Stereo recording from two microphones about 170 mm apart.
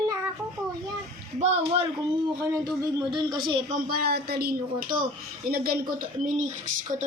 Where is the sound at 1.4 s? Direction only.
40° right (ahead or behind).